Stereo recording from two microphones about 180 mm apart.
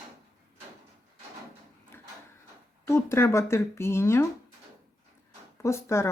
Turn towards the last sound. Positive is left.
turn(degrees=15)  # may be behind; listen again after turning